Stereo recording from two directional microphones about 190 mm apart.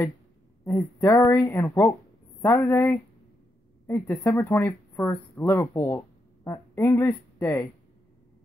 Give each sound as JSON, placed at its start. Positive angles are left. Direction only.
{"t": 0.7, "sound": "speech", "side_deg": 10}